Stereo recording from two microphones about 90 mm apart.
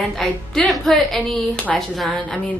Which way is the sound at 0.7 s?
5° left (ahead or behind).